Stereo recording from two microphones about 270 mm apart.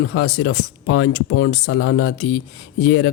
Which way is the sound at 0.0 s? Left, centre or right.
Left.